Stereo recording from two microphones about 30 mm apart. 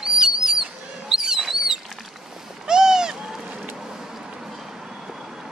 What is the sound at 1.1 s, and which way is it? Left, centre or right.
Bird, centre.